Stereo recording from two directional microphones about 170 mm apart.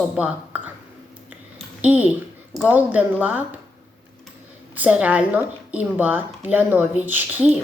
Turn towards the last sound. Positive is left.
turn(degrees=-10)  # may be behind; listen again after turning